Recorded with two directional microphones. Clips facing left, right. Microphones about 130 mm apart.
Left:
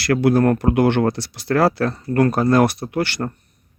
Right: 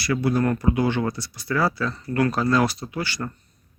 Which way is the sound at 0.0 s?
75° left (ahead or behind).